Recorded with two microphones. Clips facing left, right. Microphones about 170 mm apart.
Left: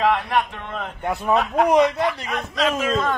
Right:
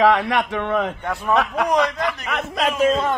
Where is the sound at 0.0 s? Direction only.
80° right.